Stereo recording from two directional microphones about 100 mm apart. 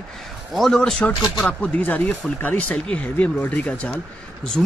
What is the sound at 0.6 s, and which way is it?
Speech, 5° left (ahead or behind).